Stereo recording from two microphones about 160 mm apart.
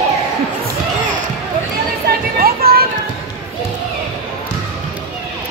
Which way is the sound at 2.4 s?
70° right (ahead or behind).